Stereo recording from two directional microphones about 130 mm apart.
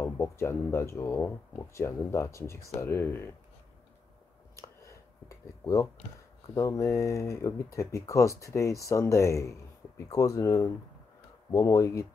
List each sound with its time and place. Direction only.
0.0 s speech: 20° left (ahead or behind)
4.6 s a sound: 25° left (ahead or behind)
6.5 s speech: 25° left (ahead or behind)